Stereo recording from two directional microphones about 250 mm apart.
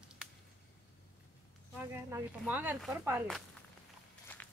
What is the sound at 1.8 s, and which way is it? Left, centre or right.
Speech, centre.